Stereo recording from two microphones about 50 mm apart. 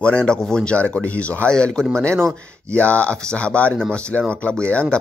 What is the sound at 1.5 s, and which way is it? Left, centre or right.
Speech, centre.